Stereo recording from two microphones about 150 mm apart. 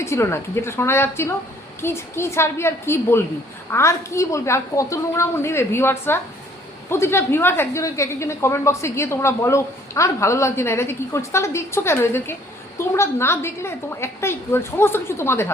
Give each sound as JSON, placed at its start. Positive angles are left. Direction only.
{"t": 0.0, "sound": "a woman's voice", "side_deg": 20}